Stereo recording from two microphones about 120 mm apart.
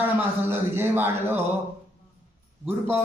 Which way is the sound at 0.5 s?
20° right (ahead or behind).